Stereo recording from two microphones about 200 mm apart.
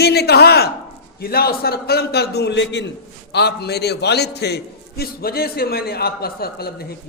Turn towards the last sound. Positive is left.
turn(degrees=50)  # may be behind; listen again after turning